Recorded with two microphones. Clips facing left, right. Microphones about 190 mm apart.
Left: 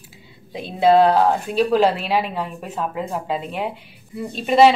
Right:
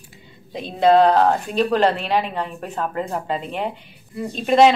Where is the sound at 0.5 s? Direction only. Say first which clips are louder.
Even; 5° left (ahead or behind).